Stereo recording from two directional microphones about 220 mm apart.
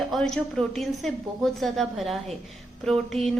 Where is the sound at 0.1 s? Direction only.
Centre (ahead or behind).